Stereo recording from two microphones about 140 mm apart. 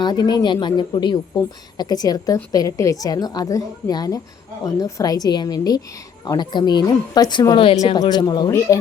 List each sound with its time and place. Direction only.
0.0 s a woman's voice: 30° left (ahead or behind)